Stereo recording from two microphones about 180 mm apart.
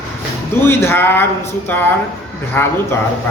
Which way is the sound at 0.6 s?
15° left (ahead or behind).